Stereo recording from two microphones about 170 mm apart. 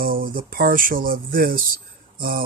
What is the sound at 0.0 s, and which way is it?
Speech, 55° right (ahead or behind).